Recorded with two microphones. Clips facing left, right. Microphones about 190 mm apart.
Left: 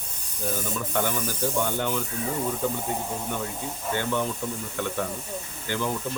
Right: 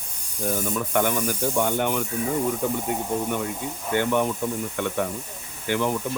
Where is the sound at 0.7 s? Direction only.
60° right (ahead or behind).